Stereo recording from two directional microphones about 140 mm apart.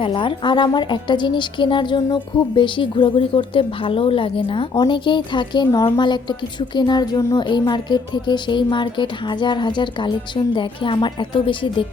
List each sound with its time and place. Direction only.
0.0 s a woman's voice: 35° left (ahead or behind)